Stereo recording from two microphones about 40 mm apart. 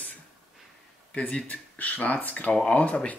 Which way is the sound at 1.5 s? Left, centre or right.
Left.